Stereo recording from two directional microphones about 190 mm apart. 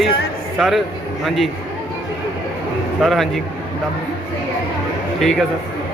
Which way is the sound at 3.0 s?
Centre (ahead or behind).